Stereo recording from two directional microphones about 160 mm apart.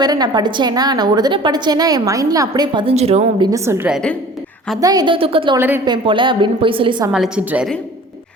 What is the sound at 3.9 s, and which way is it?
Speech, 5° left (ahead or behind).